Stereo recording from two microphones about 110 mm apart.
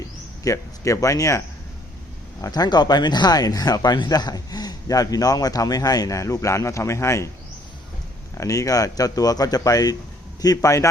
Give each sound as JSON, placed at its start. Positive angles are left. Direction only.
{"t": 0.4, "sound": "speech", "side_deg": 30}
{"t": 2.4, "sound": "speech", "side_deg": 35}
{"t": 8.4, "sound": "speech", "side_deg": 30}